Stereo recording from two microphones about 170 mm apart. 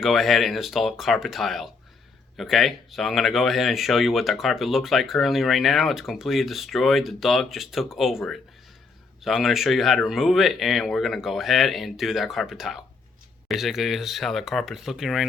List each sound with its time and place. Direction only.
0.0 s speech: centre (ahead or behind)